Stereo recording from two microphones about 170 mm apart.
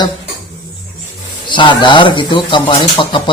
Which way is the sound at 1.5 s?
30° left (ahead or behind).